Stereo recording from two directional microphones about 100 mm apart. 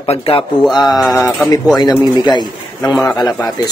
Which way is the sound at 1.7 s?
45° left (ahead or behind).